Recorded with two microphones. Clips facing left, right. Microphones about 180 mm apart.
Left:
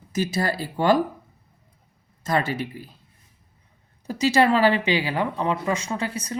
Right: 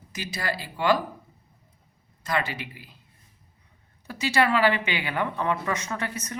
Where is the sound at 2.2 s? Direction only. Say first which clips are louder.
Left 5 dB; 45° left (ahead or behind).